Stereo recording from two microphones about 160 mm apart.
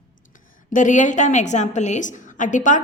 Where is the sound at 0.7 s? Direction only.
50° left (ahead or behind).